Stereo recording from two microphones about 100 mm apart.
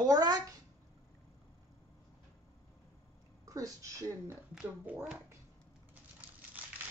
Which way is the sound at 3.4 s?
35° right (ahead or behind).